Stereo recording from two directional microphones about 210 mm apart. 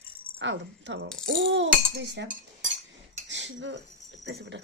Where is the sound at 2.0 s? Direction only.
55° right (ahead or behind).